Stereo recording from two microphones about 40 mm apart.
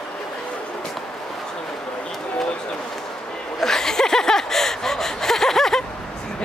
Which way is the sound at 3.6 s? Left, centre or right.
Centre.